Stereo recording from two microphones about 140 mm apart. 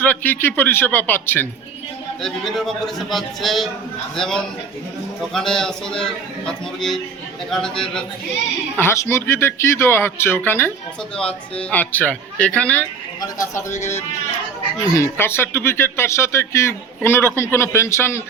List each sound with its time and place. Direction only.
0.0 s speech: 10° left (ahead or behind)
2.2 s a man's voice: centre (ahead or behind)
8.8 s speech: 20° left (ahead or behind)
13.2 s speech: 20° left (ahead or behind)